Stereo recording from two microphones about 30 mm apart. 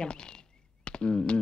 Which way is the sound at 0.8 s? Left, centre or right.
Left.